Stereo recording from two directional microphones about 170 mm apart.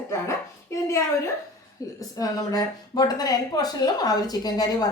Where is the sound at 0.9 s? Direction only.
15° left (ahead or behind).